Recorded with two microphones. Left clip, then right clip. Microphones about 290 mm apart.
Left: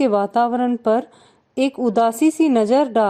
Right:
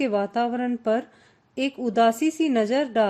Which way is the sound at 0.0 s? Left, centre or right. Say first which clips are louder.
Left 7 dB; left.